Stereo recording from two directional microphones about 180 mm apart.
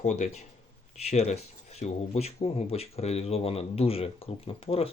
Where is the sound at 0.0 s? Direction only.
40° left (ahead or behind).